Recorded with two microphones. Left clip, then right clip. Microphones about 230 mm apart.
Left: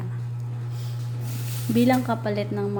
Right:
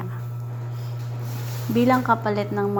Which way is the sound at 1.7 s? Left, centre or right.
Centre.